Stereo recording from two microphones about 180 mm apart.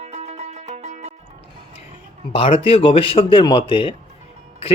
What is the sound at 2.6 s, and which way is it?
Speech, 30° left (ahead or behind).